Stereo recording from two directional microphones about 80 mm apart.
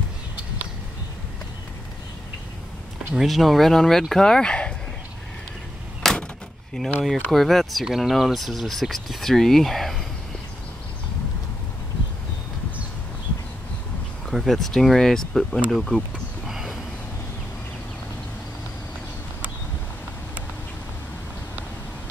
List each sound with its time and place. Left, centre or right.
3.2 s speech: centre
6.0 s door: centre
6.8 s speech: centre
14.2 s speech: centre
16.4 s a sound: centre